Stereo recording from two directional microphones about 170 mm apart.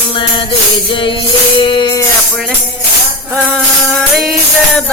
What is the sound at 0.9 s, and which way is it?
Music, 30° left (ahead or behind).